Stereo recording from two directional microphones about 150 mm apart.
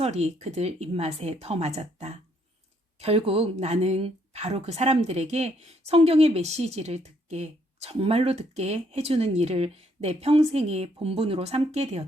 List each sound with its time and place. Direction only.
0.0 s a woman's voice: 45° right (ahead or behind)